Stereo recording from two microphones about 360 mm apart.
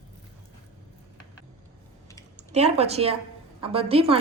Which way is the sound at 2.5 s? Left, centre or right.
Centre.